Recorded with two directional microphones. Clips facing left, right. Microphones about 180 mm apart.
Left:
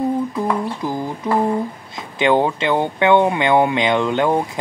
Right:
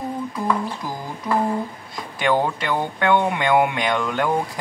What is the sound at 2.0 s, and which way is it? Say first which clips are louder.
Speech: left 4 dB; 25° left (ahead or behind).